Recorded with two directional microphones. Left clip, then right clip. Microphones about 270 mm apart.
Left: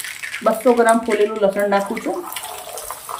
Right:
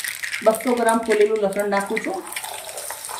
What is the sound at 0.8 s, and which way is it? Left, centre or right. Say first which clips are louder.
Speech: left 2 dB; centre.